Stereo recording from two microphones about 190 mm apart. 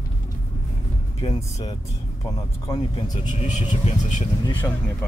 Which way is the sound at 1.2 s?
30° left (ahead or behind).